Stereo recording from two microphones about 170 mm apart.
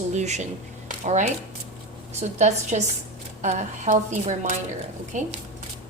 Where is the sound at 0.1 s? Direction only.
45° right (ahead or behind).